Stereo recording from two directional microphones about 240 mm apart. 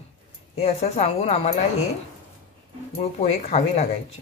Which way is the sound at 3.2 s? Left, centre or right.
Left.